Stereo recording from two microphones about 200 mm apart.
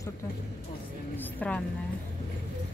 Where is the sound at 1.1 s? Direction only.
10° left (ahead or behind).